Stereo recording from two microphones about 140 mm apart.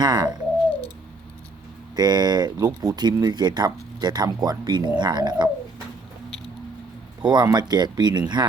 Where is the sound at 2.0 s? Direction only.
30° right (ahead or behind).